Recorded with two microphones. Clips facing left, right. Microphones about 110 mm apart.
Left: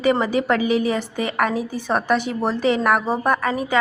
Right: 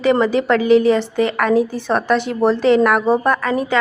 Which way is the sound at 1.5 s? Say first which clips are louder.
Right 10 dB; 40° right (ahead or behind).